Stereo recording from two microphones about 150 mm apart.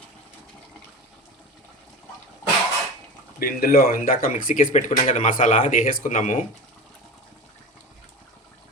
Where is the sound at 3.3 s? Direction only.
75° left (ahead or behind).